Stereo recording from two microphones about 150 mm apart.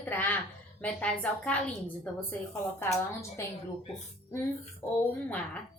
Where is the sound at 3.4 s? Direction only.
20° left (ahead or behind).